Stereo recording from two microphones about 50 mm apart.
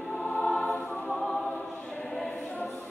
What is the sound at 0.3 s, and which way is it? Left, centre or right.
Choir, left.